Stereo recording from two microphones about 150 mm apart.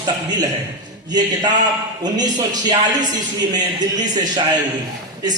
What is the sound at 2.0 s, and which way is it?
A man's voice, 25° right (ahead or behind).